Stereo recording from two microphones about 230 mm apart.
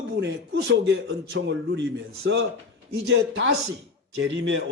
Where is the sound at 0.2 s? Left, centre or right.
Right.